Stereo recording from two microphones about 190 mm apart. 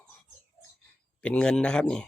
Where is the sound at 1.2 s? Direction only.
5° left (ahead or behind).